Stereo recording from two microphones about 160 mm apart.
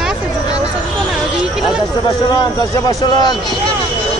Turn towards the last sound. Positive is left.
turn(degrees=25)  # may be behind; listen again after turning